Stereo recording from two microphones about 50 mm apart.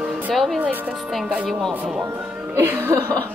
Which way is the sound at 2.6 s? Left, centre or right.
Right.